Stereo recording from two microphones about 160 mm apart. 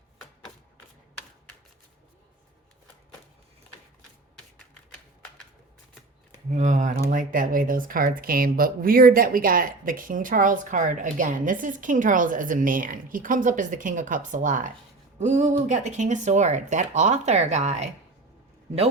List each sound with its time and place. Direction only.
6.5 s speech: 50° right (ahead or behind)